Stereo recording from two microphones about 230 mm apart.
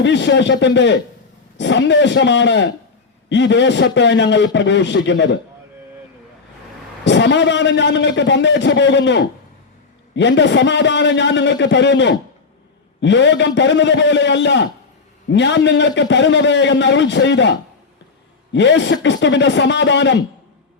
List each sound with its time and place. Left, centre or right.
0.0 s a man's voice: left
7.0 s a man's voice: left
18.5 s a man's voice: left